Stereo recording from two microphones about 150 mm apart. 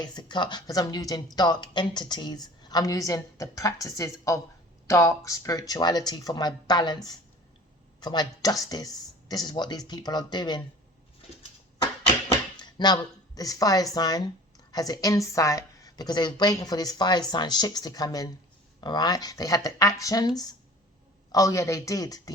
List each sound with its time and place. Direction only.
0.0 s a woman's voice: 30° left (ahead or behind)
12.7 s a woman's voice: 30° left (ahead or behind)